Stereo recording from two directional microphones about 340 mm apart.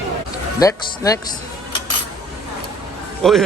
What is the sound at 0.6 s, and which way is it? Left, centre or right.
Speech, centre.